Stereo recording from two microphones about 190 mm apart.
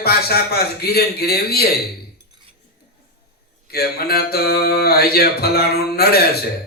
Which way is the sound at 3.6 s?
55° left (ahead or behind).